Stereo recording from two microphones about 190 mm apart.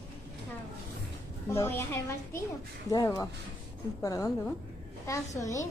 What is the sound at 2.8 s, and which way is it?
A woman's voice, 15° left (ahead or behind).